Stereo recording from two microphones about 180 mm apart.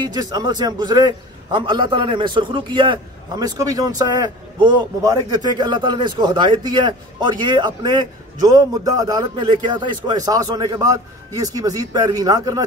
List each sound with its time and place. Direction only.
0.1 s a man's voice: 25° right (ahead or behind)